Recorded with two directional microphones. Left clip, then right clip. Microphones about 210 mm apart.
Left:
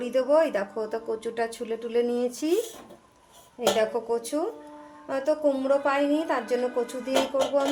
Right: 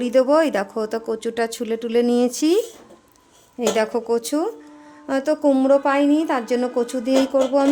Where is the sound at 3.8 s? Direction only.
55° right (ahead or behind).